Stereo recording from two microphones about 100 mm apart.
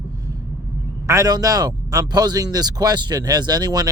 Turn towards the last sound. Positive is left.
turn(degrees=-40)  # may be behind; listen again after turning